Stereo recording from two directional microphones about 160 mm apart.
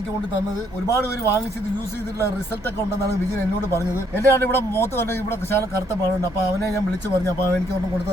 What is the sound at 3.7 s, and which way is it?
Speech, 15° left (ahead or behind).